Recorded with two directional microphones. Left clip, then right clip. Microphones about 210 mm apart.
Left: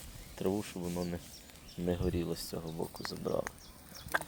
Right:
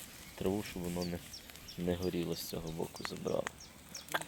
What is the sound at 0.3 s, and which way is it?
Speech, centre (ahead or behind).